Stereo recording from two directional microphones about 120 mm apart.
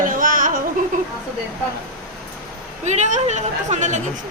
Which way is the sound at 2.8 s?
75° right (ahead or behind).